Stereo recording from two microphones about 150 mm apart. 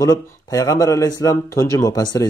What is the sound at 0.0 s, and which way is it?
Speech, 25° left (ahead or behind).